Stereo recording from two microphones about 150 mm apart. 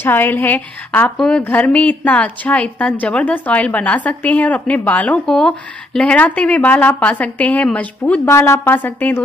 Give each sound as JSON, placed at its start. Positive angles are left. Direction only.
{"t": 0.0, "sound": "a woman's voice", "side_deg": 15}